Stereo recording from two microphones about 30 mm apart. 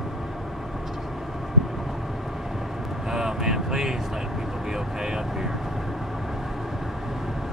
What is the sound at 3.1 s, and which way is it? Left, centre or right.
Vehicle, centre.